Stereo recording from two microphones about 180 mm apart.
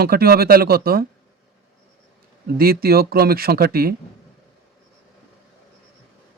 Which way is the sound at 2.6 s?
55° right (ahead or behind).